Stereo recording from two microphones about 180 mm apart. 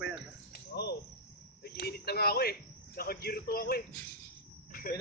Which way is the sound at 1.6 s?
60° left (ahead or behind).